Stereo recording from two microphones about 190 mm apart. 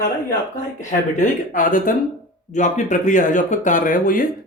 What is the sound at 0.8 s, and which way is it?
Speech, 40° left (ahead or behind).